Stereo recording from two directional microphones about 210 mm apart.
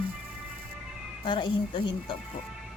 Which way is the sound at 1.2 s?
25° left (ahead or behind).